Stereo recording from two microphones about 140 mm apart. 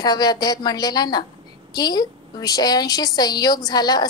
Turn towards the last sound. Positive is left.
turn(degrees=30)  # may be behind; listen again after turning